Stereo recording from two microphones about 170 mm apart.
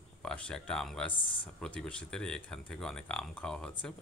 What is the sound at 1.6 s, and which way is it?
Speech, 5° left (ahead or behind).